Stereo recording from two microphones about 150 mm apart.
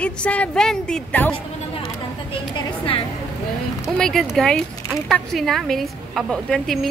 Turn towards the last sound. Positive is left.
turn(degrees=5)  # may be behind; listen again after turning